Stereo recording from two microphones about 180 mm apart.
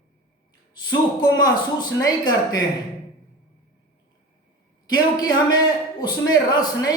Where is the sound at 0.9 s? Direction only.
20° left (ahead or behind).